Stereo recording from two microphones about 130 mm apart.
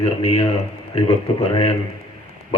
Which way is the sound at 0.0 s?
50° left (ahead or behind).